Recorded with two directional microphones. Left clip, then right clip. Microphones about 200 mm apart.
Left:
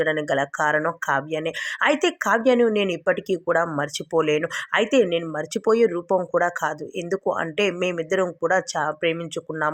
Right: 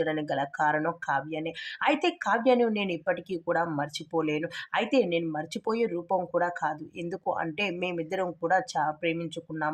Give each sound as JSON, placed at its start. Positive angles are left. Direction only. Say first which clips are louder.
{"t": 0.0, "sound": "speech", "louder": "left 7 dB", "side_deg": 20}